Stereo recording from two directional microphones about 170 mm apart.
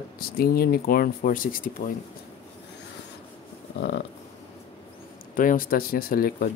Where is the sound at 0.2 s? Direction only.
60° left (ahead or behind).